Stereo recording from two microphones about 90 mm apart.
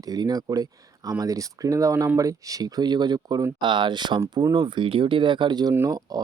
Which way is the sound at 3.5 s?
60° right (ahead or behind).